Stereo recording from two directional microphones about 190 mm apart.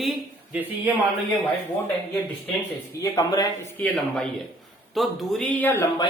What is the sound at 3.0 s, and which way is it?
Speech, 20° left (ahead or behind).